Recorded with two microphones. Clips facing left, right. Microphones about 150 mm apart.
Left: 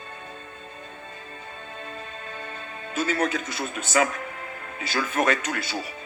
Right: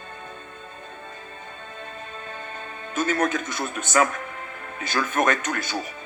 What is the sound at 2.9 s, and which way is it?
Speech, 50° right (ahead or behind).